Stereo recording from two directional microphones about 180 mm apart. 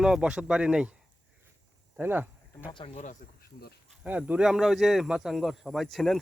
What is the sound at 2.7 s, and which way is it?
Speech, 25° left (ahead or behind).